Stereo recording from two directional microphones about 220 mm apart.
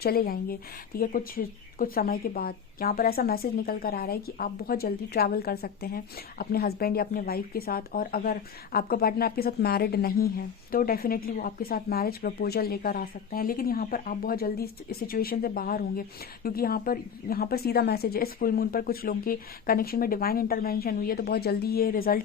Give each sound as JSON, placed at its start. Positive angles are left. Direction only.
{"t": 0.0, "sound": "speech", "side_deg": 45}